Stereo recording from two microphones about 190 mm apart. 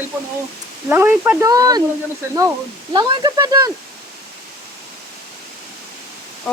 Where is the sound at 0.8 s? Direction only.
10° right (ahead or behind).